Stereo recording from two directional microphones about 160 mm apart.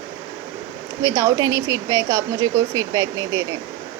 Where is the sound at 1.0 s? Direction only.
20° right (ahead or behind).